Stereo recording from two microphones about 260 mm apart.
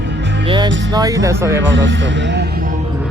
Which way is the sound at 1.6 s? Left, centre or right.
Right.